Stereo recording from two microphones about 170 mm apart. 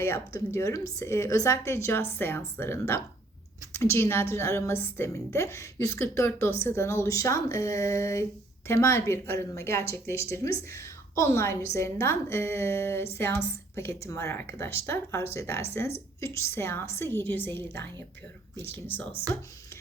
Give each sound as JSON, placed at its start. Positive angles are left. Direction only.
{"t": 0.0, "sound": "a woman's voice", "side_deg": 15}
{"t": 18.6, "sound": "a woman's voice", "side_deg": 10}